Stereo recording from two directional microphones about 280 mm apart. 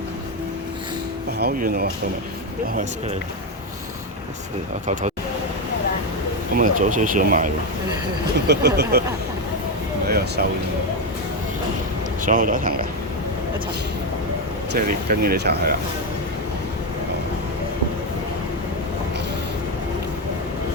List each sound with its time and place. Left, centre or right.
1.4 s speech: right
6.5 s speech: right
10.1 s speech: right
12.2 s speech: right
14.7 s speech: right